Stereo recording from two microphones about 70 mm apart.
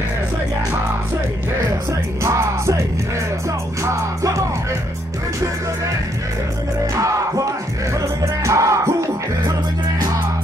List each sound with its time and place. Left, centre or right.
2.2 s music: right
3.8 s music: right
7.0 s music: right